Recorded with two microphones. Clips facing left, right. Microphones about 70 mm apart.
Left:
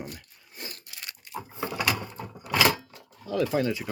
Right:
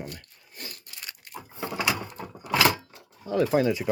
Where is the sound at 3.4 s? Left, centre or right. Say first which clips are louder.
Right 3 dB; centre.